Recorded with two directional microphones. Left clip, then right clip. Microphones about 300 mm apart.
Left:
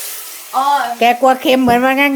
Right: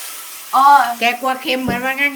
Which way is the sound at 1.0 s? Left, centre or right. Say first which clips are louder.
Left 7 dB; centre.